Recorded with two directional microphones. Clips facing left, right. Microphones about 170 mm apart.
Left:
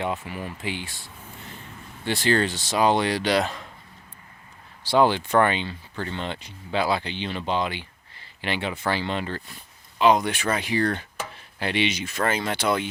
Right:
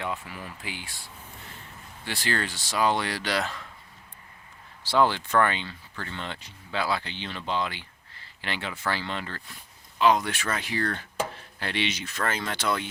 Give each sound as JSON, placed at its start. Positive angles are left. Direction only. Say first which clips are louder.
{"t": 0.0, "sound": "speech", "louder": "left 5 dB", "side_deg": 20}
{"t": 2.0, "sound": "speech", "louder": "left 8 dB", "side_deg": 25}
{"t": 4.9, "sound": "speech", "louder": "left 4 dB", "side_deg": 15}